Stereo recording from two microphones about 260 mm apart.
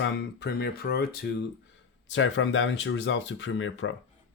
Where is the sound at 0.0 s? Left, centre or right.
Left.